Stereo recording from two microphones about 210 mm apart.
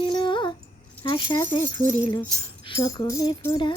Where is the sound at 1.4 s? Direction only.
15° left (ahead or behind).